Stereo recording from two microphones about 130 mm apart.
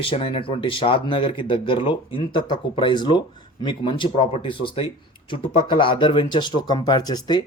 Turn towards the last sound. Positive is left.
turn(degrees=30)  # may be behind; listen again after turning